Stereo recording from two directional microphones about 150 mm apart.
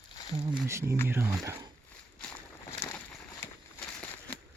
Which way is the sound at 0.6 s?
20° right (ahead or behind).